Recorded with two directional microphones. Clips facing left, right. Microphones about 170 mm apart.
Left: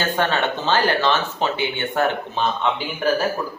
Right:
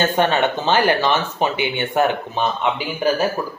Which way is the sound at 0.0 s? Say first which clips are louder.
Right 4 dB; 20° right (ahead or behind).